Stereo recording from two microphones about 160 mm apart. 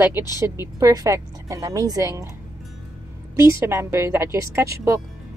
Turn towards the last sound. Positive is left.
turn(degrees=-20)  # may be behind; listen again after turning